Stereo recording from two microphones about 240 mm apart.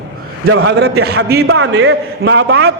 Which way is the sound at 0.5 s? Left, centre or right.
Right.